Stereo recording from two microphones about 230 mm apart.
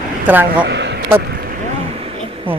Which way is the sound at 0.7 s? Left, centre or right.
Right.